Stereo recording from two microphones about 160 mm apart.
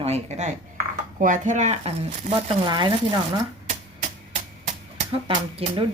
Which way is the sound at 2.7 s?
25° right (ahead or behind).